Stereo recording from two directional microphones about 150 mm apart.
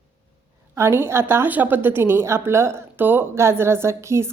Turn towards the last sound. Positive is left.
turn(degrees=-20)  # may be behind; listen again after turning